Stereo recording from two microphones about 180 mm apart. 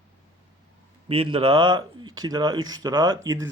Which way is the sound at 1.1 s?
30° right (ahead or behind).